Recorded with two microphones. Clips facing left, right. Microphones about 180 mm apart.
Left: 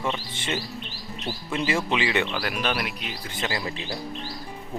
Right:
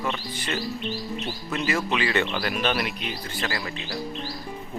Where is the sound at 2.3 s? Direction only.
Centre (ahead or behind).